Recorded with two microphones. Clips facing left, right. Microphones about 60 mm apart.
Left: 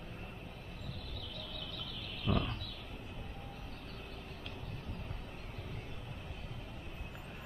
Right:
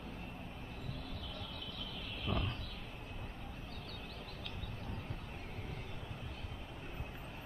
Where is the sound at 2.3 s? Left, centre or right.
Left.